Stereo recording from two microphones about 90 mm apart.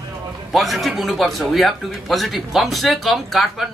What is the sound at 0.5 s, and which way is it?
A man's voice, centre (ahead or behind).